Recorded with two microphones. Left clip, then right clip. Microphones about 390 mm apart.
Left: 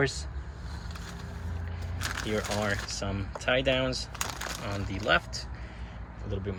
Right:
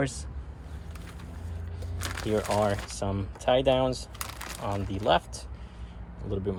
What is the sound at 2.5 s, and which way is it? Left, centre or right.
Speech, centre.